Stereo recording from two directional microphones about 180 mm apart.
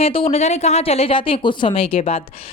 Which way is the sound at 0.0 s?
30° left (ahead or behind).